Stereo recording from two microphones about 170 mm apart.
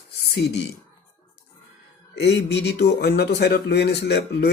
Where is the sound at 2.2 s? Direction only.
90° left.